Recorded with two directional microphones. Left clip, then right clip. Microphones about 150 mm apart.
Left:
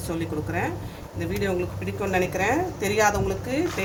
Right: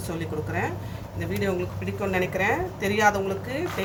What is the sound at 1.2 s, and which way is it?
A woman's voice, 35° left (ahead or behind).